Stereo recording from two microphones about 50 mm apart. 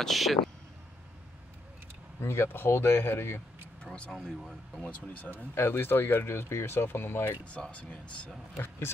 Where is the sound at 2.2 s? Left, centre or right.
Left.